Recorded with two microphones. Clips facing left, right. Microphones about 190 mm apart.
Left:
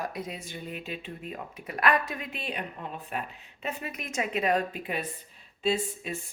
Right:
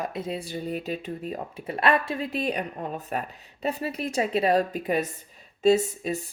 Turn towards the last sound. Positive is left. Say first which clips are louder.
# right 8 dB
turn(degrees=-40)  # may be behind; listen again after turning